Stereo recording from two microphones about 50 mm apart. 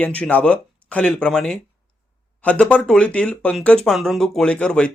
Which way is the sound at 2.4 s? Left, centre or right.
Left.